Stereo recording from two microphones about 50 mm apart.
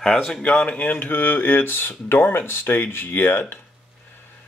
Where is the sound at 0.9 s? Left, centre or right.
Left.